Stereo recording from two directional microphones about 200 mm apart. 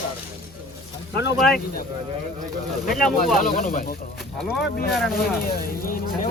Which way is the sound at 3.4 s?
40° left (ahead or behind).